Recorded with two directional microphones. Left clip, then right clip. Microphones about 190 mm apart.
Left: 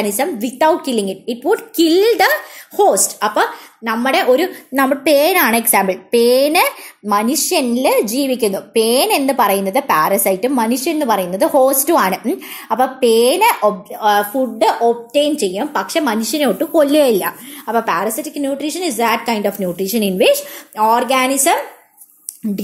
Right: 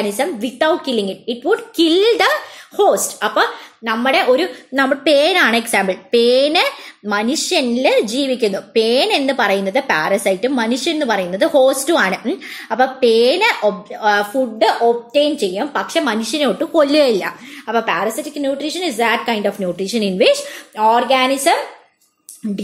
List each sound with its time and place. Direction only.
0.0 s a woman's voice: 25° left (ahead or behind)
20.8 s speech: 30° left (ahead or behind)